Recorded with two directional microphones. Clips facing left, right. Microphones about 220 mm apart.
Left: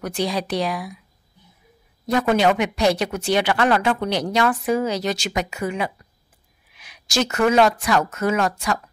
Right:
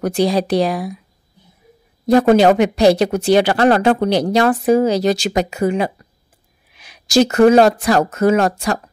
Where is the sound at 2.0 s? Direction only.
35° right (ahead or behind).